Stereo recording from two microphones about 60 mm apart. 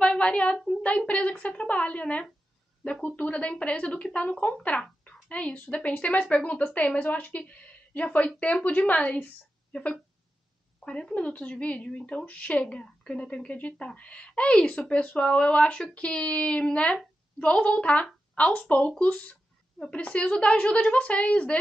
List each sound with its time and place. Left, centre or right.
0.0 s speech: centre
10.8 s a woman's voice: centre